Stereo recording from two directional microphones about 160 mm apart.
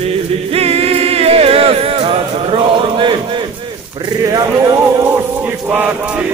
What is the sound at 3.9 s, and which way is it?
Speech, 25° right (ahead or behind).